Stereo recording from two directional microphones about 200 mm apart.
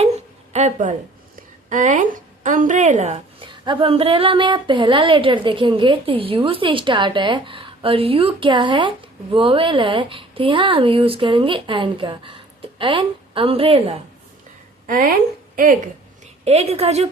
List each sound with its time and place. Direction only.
0.5 s a woman's voice: 35° right (ahead or behind)
14.8 s speech: 45° right (ahead or behind)
16.2 s a woman's voice: 30° right (ahead or behind)